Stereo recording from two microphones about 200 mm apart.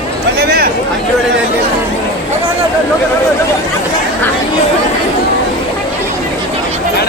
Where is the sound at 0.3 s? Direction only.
50° right (ahead or behind).